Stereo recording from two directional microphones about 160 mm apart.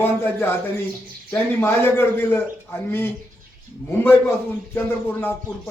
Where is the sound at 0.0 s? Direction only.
15° left (ahead or behind).